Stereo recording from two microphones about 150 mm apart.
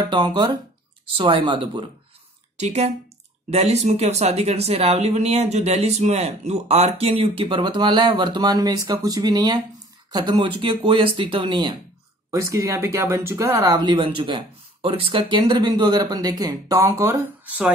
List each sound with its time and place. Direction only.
0.0 s speech: 30° right (ahead or behind)
2.5 s speech: 50° right (ahead or behind); by 17.7 s 10° right (ahead or behind)